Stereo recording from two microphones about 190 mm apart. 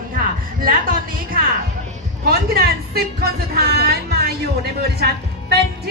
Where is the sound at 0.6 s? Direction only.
50° right (ahead or behind).